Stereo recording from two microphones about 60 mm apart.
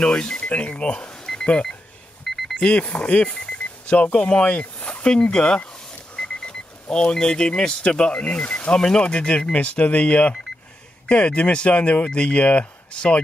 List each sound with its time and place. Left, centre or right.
0.0 s speech: centre
2.2 s a sound: centre
2.7 s speech: left